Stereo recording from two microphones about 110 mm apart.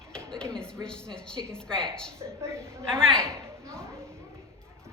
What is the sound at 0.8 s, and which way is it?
A woman's voice, 5° left (ahead or behind).